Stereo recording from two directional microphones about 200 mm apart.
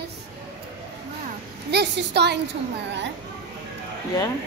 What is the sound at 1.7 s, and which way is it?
Speech, 55° right (ahead or behind).